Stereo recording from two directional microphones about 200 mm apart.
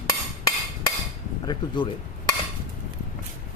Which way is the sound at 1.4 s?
25° left (ahead or behind).